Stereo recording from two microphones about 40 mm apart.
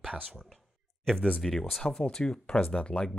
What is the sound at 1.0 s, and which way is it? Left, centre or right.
Speech, centre.